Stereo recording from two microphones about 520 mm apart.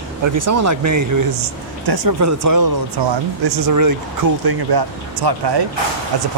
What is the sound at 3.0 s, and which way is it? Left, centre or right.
Speech, right.